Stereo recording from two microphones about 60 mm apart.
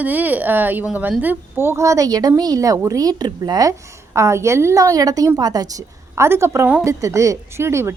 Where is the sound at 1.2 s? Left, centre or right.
Right.